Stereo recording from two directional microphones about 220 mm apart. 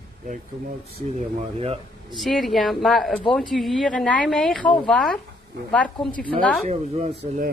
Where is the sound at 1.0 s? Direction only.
30° right (ahead or behind).